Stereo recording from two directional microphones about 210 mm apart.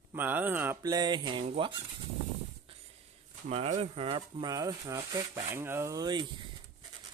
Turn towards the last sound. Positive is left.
turn(degrees=-20)  # may be behind; listen again after turning